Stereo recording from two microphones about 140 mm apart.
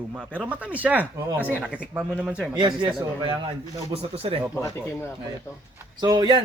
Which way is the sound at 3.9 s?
45° right (ahead or behind).